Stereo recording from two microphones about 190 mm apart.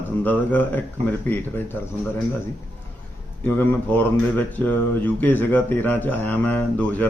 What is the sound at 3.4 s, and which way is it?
Speech, 10° left (ahead or behind).